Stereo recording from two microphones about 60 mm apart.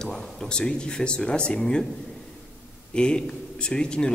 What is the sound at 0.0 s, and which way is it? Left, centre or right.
Speech, centre.